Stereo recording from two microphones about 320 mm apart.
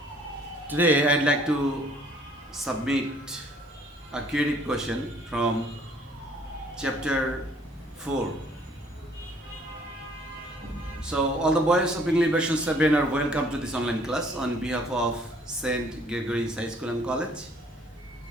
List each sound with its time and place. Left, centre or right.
0.7 s a man's voice: centre
2.6 s a man's voice: centre
6.7 s a man's voice: centre
11.0 s a man's voice: centre